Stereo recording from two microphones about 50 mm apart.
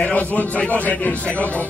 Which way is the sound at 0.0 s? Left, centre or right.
Left.